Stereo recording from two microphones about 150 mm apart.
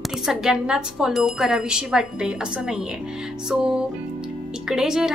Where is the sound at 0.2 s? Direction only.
5° right (ahead or behind).